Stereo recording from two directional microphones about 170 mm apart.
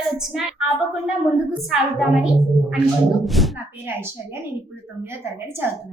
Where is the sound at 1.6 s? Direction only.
Centre (ahead or behind).